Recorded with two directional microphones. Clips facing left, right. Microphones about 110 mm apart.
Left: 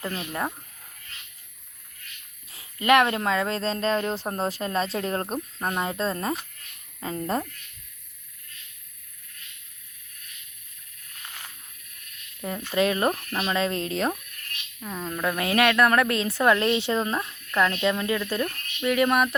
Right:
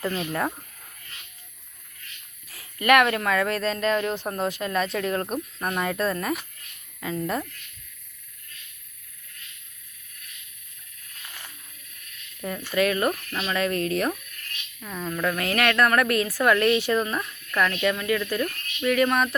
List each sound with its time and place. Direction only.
2.5 s speech: 25° left (ahead or behind)
7.0 s insect: 35° left (ahead or behind)
12.4 s speech: 20° left (ahead or behind)